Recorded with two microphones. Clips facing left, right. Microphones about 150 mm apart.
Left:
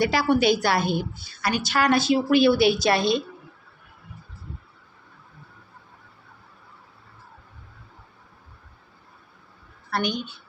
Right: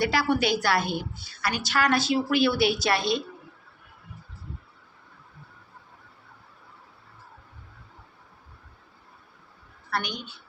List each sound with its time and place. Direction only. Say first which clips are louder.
0.0 s a woman's voice: left 4 dB; 20° left (ahead or behind)
9.9 s a woman's voice: left 5 dB; 20° left (ahead or behind)